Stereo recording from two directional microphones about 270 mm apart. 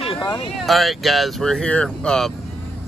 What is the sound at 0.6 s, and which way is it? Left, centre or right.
Speech, centre.